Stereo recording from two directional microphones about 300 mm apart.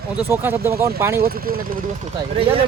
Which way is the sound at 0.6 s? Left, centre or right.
Right.